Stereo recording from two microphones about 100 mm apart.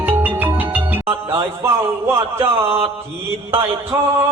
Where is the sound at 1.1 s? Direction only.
25° right (ahead or behind).